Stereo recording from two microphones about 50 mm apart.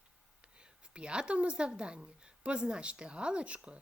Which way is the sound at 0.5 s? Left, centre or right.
Right.